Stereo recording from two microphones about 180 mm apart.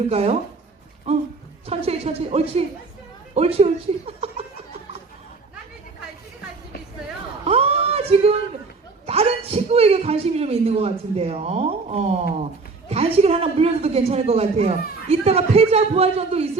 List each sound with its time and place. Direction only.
0.1 s speech: 35° right (ahead or behind)
1.6 s speech: 35° right (ahead or behind)
7.4 s a sound: 35° right (ahead or behind)
9.0 s speech: 35° right (ahead or behind)